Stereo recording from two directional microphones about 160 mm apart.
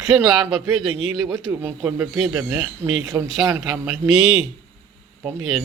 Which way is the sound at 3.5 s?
15° right (ahead or behind).